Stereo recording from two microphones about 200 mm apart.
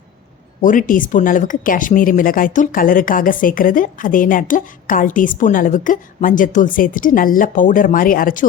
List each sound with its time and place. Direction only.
0.6 s speech: 40° left (ahead or behind)